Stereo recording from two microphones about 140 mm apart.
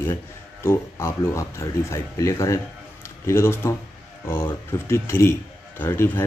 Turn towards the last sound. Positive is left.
turn(degrees=15)  # may be behind; listen again after turning